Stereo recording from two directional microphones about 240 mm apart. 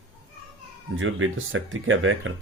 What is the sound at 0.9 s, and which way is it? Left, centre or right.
Speech, right.